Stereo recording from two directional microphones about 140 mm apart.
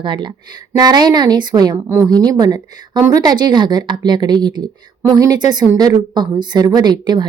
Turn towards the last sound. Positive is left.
turn(degrees=-30)  # may be behind; listen again after turning